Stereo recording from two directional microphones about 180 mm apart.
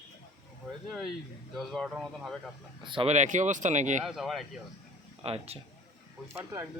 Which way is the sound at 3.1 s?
40° right (ahead or behind).